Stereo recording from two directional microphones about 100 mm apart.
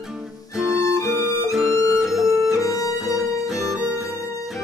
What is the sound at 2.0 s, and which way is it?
Guitar, centre (ahead or behind).